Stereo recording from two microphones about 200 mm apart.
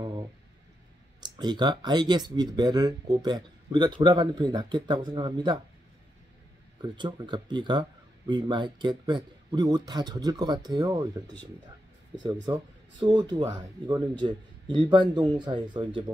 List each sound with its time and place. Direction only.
1.2 s speech: 20° right (ahead or behind)
6.8 s speech: 25° right (ahead or behind)
12.5 s speech: 20° right (ahead or behind)